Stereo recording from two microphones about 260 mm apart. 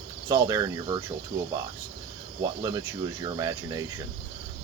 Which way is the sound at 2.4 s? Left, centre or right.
Centre.